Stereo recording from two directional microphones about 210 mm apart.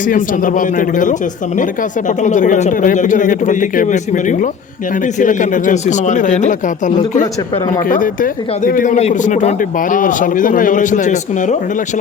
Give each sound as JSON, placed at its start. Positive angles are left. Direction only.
{"t": 0.0, "sound": "speech", "side_deg": 40}